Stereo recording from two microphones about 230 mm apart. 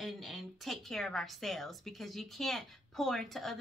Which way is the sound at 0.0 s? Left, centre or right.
Centre.